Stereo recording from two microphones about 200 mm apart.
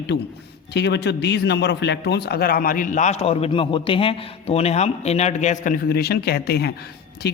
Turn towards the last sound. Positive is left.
turn(degrees=55)  # may be behind; listen again after turning